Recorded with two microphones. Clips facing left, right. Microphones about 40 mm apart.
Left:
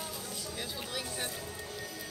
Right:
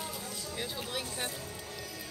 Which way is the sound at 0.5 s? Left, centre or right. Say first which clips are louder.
Right 3 dB; centre.